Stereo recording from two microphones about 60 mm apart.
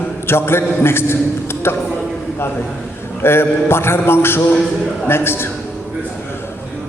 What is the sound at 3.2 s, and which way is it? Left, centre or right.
A man's voice, left.